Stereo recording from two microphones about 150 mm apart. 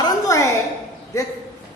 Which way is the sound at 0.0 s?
20° left (ahead or behind).